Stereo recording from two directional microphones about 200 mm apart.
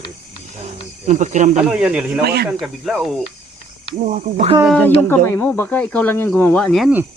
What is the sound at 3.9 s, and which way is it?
Speech, 35° right (ahead or behind).